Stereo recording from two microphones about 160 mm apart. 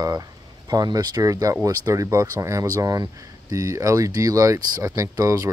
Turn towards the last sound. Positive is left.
turn(degrees=-20)  # may be behind; listen again after turning